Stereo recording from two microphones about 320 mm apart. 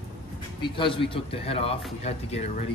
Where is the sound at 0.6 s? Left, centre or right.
Centre.